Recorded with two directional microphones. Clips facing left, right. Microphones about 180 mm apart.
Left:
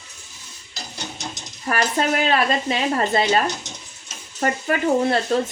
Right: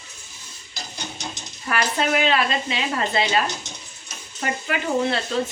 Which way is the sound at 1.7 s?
40° left (ahead or behind).